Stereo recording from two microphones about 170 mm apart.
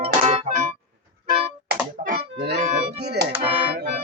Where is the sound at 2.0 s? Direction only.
50° right (ahead or behind).